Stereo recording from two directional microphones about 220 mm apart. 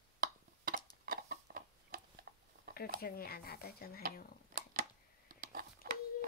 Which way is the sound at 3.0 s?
45° left (ahead or behind).